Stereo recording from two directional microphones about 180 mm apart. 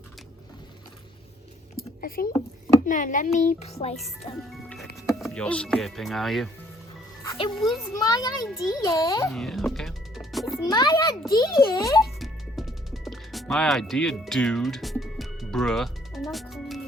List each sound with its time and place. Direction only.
1.7 s a sound: 55° left (ahead or behind)
2.8 s a child's voice: 45° left (ahead or behind)
5.0 s speech: centre (ahead or behind)
7.3 s a child's voice: 25° left (ahead or behind)
9.3 s music: centre (ahead or behind)
10.7 s a child's voice: 25° left (ahead or behind)
12.2 s music: centre (ahead or behind)